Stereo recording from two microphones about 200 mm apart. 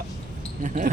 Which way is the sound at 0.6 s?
40° right (ahead or behind).